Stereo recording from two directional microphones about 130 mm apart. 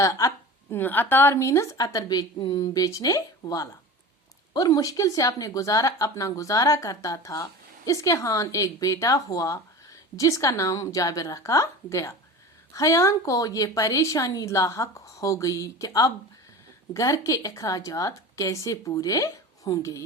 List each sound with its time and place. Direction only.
0.0 s speech: 25° left (ahead or behind)